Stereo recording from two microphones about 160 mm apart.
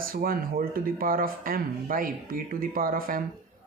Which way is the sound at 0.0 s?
65° right (ahead or behind).